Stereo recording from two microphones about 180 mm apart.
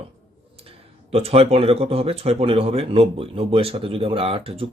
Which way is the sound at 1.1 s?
35° right (ahead or behind).